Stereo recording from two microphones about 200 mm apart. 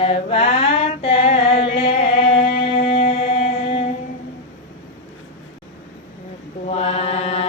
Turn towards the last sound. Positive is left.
turn(degrees=30)  # may be behind; listen again after turning